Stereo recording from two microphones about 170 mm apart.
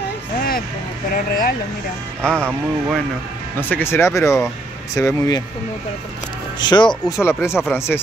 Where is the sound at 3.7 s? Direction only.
15° left (ahead or behind).